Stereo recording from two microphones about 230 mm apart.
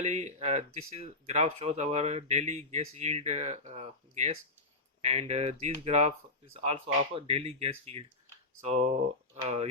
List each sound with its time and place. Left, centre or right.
0.0 s speech: right